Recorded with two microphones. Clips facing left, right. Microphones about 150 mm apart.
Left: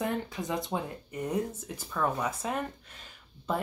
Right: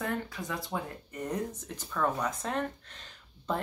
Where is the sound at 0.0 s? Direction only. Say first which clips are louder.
Left 2 dB; 20° left (ahead or behind).